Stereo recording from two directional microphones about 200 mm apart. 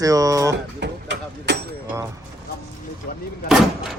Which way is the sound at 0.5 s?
60° right (ahead or behind).